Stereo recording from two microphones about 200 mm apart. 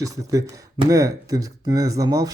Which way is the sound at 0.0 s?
15° right (ahead or behind).